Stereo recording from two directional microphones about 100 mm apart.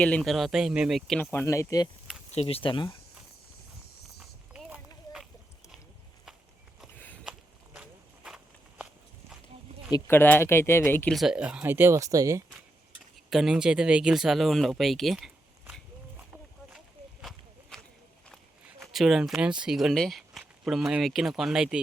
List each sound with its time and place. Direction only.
0.0 s speech: 10° left (ahead or behind)
1.2 s speech: 20° left (ahead or behind)
1.5 s speech: 30° left (ahead or behind)
2.3 s speech: 80° left; by 2.9 s 60° left (ahead or behind)
7.3 s a sound: 5° right (ahead or behind)
10.1 s speech: 20° left (ahead or behind)
11.1 s speech: 5° right (ahead or behind)
11.6 s speech: 20° right (ahead or behind)
13.3 s speech: 5° right (ahead or behind)
16.7 s a sound: centre (ahead or behind)
18.8 s speech: centre (ahead or behind)